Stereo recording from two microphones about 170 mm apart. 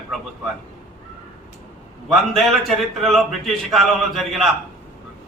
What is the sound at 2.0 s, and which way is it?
A man's voice, centre (ahead or behind).